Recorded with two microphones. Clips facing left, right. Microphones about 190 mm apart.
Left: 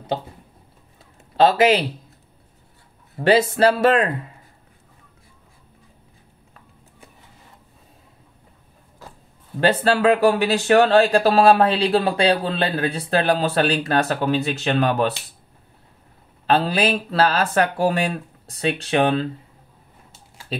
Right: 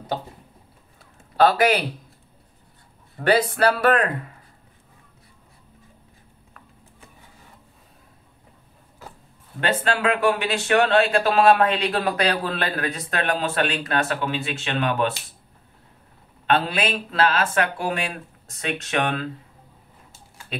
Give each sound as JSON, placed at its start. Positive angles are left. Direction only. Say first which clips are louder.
{"t": 1.3, "sound": "speech", "louder": "left 2 dB", "side_deg": 25}
{"t": 3.2, "sound": "speech", "louder": "left 3 dB", "side_deg": 25}
{"t": 9.6, "sound": "speech", "louder": "left 5 dB", "side_deg": 35}
{"t": 16.4, "sound": "speech", "louder": "left 3 dB", "side_deg": 35}